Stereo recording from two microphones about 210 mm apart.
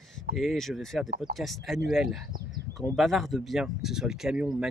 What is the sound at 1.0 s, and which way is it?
Speech, 45° right (ahead or behind).